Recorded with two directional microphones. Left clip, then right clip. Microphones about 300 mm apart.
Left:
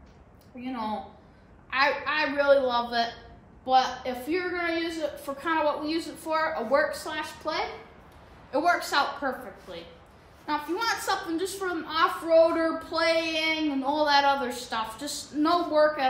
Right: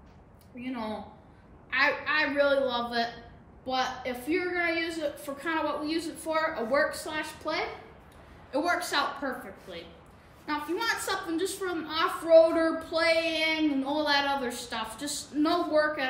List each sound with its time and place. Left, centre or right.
0.6 s speech: centre